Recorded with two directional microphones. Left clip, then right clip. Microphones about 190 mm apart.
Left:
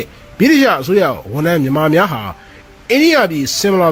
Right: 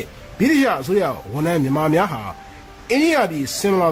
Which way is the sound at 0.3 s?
25° left (ahead or behind).